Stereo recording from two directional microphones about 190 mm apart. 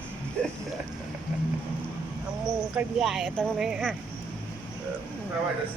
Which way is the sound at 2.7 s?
Centre (ahead or behind).